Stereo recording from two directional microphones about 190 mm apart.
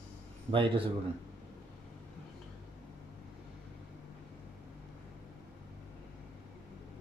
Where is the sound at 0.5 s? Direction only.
25° right (ahead or behind).